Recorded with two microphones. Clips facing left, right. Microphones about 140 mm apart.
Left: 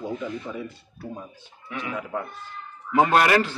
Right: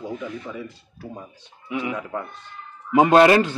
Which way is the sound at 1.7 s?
15° right (ahead or behind).